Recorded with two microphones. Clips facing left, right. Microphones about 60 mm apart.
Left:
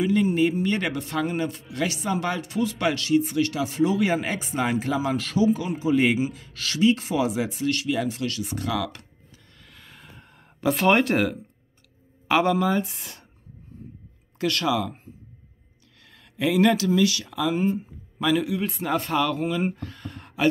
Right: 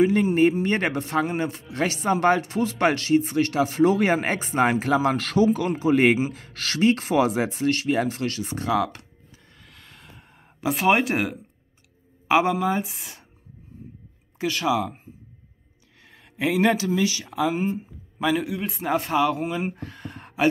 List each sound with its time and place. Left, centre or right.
0.0 s speech: right
9.6 s a sound: centre
10.2 s speech: centre
14.4 s speech: centre
16.0 s speech: right